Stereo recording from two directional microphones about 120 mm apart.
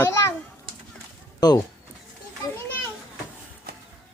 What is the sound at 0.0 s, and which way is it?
Children playing, 20° left (ahead or behind).